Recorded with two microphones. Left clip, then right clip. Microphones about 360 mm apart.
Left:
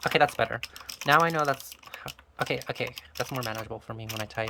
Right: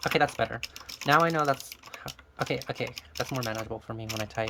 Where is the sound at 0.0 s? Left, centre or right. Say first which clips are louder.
Left 2 dB; centre.